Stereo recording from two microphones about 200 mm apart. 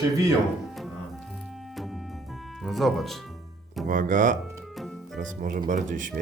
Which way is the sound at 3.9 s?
40° right (ahead or behind).